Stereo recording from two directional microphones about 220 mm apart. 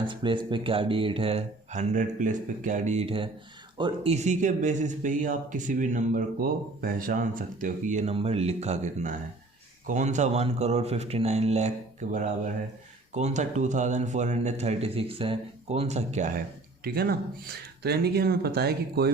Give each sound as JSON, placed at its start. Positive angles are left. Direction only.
{"t": 0.1, "sound": "speech", "side_deg": -20}
{"t": 16.8, "sound": "speech", "side_deg": -45}